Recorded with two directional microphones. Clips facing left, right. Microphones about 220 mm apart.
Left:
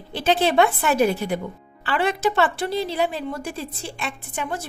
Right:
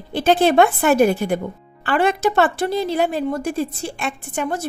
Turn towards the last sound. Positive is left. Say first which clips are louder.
# right 5 dB
turn(degrees=-45)  # may be behind; listen again after turning